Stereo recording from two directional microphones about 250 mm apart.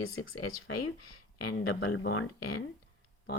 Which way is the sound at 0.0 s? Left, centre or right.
Left.